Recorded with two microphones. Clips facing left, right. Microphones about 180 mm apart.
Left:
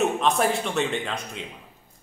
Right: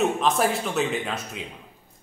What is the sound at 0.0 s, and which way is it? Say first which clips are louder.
A man's voice: even; centre (ahead or behind).